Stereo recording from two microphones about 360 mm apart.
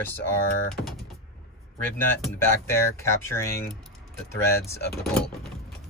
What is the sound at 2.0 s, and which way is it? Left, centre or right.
Speech, centre.